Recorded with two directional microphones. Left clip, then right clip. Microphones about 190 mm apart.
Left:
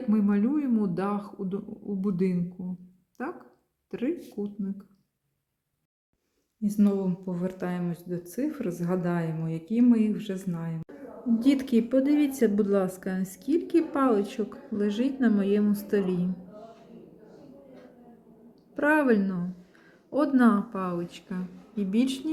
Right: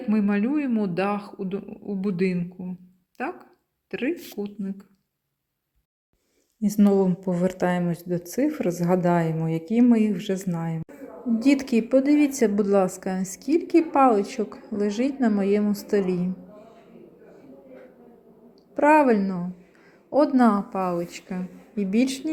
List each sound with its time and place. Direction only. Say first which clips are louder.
0.1 s a woman's voice: right 2 dB; 15° right (ahead or behind)
6.6 s a woman's voice: right 7 dB; 25° right (ahead or behind)
18.7 s a woman's voice: right 6 dB; 15° right (ahead or behind)